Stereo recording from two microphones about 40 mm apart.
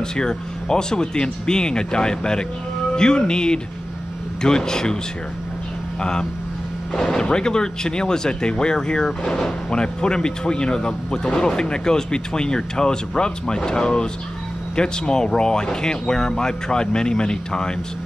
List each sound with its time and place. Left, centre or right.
0.1 s a man's voice: centre
6.9 s speech: centre